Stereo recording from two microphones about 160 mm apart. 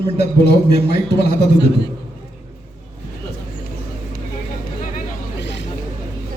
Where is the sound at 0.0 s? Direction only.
90° left.